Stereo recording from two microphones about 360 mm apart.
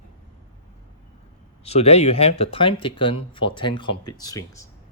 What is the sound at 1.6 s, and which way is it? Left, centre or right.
Speech, centre.